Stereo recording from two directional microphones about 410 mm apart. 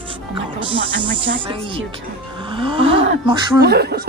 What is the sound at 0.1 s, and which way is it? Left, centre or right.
Speech, centre.